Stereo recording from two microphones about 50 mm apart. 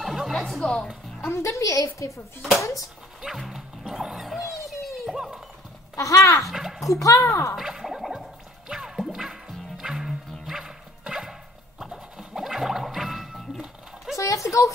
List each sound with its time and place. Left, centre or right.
0.0 s music: centre
0.3 s speech: centre
1.2 s a woman's voice: left
3.2 s speech: centre
4.6 s a sound: centre
5.1 s speech: centre
5.9 s a woman's voice: left
6.4 s a sound: centre
6.9 s a woman's voice: left
7.5 s a sound: centre
8.6 s music: centre
14.1 s a sound: left